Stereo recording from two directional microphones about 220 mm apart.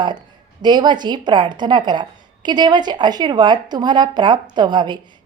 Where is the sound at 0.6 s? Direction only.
20° right (ahead or behind).